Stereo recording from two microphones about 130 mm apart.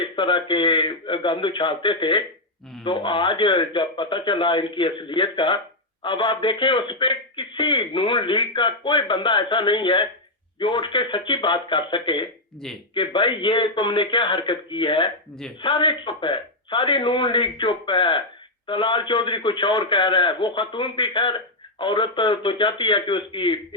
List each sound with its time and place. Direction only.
0.0 s a man's voice: 40° left (ahead or behind)